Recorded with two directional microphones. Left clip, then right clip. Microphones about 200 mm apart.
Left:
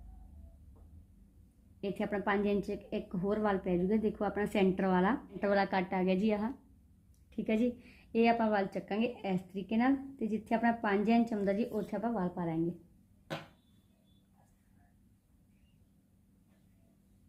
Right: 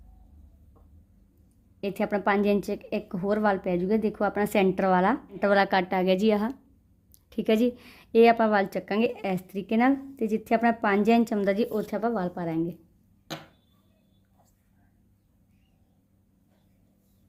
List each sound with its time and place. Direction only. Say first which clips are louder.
1.8 s a woman's voice: right 8 dB; 60° right (ahead or behind)